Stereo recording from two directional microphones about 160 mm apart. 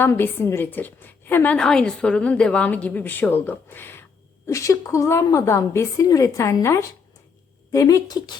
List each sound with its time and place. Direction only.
0.0 s a woman's voice: 15° left (ahead or behind)